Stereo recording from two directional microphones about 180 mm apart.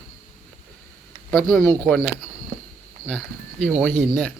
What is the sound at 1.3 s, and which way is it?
Speech, centre (ahead or behind).